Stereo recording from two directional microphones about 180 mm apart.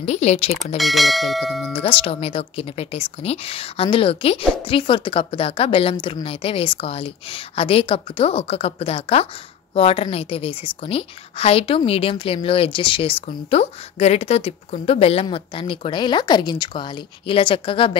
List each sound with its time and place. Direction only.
0.0 s a woman's voice: 40° left (ahead or behind)
0.7 s speech: centre (ahead or behind)
1.7 s a woman's voice: 30° left (ahead or behind)